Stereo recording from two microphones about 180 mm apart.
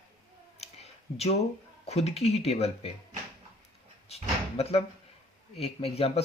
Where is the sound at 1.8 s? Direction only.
35° left (ahead or behind).